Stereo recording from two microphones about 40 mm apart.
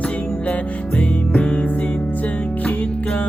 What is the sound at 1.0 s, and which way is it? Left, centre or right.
Music, left.